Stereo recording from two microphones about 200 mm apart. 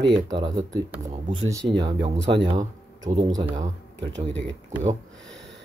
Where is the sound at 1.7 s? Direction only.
25° right (ahead or behind).